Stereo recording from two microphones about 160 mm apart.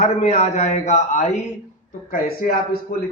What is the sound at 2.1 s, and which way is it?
Speech, 60° left (ahead or behind).